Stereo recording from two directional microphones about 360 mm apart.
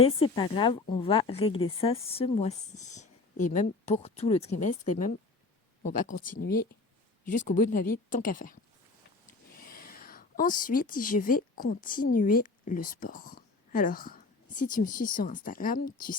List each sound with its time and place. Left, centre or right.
0.0 s a woman's voice: centre
9.6 s a woman's voice: left